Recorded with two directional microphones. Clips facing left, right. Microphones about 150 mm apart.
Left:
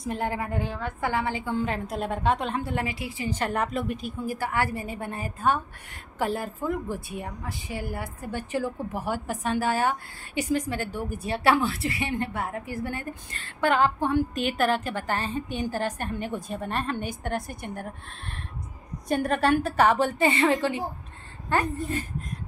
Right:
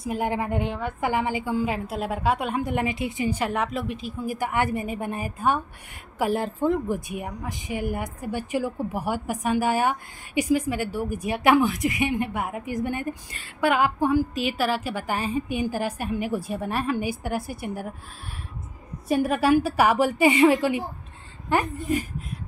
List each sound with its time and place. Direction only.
0.0 s a woman's voice: 10° right (ahead or behind)
4.3 s a woman's voice: 15° right (ahead or behind)
6.3 s a woman's voice: 25° right (ahead or behind); by 17.8 s 5° right (ahead or behind)
19.0 s a woman's voice: 5° right (ahead or behind)